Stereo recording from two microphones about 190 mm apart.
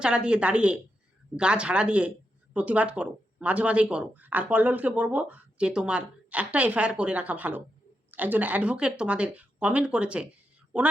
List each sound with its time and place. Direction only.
0.0 s a woman's voice: 5° right (ahead or behind)